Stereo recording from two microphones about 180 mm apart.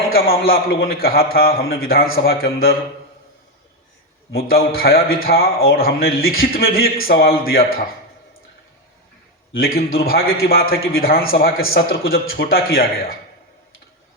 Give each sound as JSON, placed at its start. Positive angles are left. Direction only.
{"t": 0.1, "sound": "a man's voice", "side_deg": 55}
{"t": 4.3, "sound": "a man's voice", "side_deg": 60}
{"t": 9.5, "sound": "a man's voice", "side_deg": 55}